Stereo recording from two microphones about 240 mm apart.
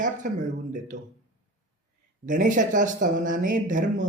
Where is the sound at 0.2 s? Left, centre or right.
Right.